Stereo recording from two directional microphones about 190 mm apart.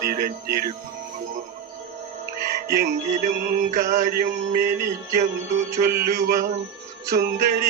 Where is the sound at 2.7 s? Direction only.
40° right (ahead or behind).